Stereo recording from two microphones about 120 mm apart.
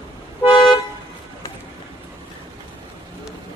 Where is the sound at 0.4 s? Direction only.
45° left (ahead or behind).